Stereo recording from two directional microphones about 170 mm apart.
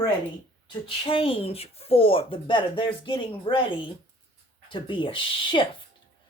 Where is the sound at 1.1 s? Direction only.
30° left (ahead or behind).